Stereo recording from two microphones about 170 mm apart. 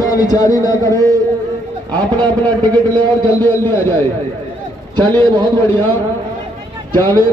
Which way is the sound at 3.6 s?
15° left (ahead or behind).